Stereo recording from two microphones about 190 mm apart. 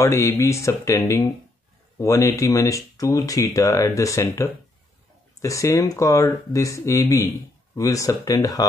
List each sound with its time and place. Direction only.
0.0 s speech: 15° left (ahead or behind)